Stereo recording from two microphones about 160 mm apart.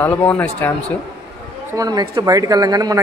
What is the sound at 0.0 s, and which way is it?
Speech, 10° left (ahead or behind).